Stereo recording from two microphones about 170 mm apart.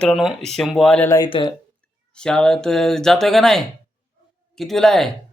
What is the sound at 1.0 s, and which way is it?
Speech, 20° left (ahead or behind).